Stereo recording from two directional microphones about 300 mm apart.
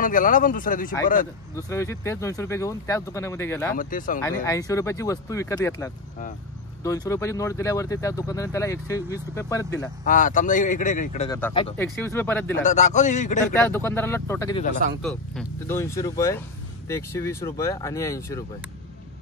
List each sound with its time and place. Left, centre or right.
0.0 s speech: left
1.5 s speech: centre
3.7 s speech: left
4.2 s speech: centre
10.0 s speech: left
11.2 s speech: centre
12.6 s speech: left
13.6 s speech: centre